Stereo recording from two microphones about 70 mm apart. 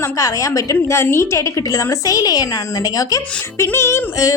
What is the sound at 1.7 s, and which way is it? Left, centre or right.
Speech, left.